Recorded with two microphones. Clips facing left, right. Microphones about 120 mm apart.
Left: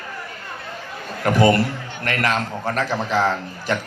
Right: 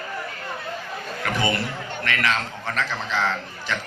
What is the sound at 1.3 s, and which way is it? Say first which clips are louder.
A man's voice: left 9 dB; 45° left (ahead or behind).